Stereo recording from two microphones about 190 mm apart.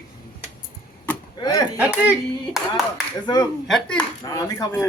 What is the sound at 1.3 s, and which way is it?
Speech, 20° left (ahead or behind).